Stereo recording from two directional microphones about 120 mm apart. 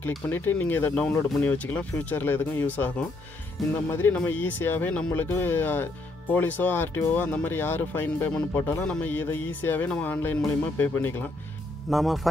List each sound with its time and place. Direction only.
0.3 s speech: 15° left (ahead or behind)
3.6 s speech: centre (ahead or behind)
3.9 s speech: 15° left (ahead or behind)
8.8 s speech: 10° left (ahead or behind)
11.9 s speech: centre (ahead or behind)